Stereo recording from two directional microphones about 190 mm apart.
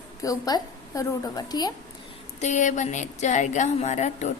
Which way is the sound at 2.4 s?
40° left (ahead or behind).